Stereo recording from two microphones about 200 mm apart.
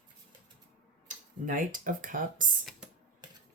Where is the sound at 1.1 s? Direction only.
40° right (ahead or behind).